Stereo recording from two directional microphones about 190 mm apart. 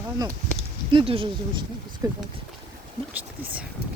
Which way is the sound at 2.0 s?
15° right (ahead or behind).